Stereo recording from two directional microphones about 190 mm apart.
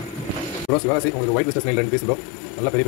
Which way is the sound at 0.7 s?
5° left (ahead or behind).